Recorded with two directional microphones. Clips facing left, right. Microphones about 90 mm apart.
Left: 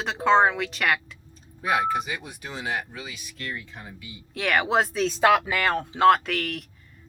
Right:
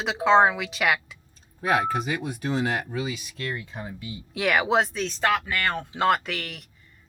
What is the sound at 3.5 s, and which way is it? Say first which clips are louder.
Speech: right 4 dB; 35° right (ahead or behind).